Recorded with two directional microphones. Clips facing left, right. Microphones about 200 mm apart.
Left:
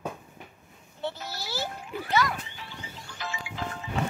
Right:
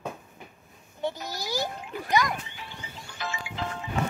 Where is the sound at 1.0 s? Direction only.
15° right (ahead or behind).